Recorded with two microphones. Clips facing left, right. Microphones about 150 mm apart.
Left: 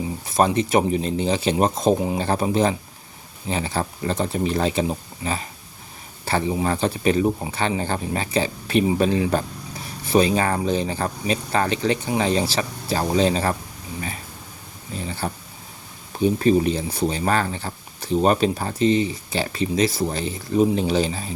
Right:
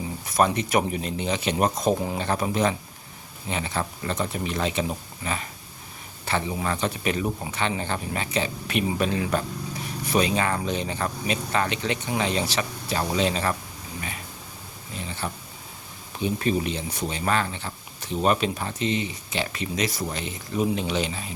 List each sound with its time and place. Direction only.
0.3 s speech: 30° left (ahead or behind)
14.9 s a sound: 35° left (ahead or behind)
16.1 s speech: 35° left (ahead or behind)